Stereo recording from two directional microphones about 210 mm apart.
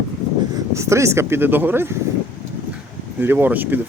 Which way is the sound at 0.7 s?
15° right (ahead or behind).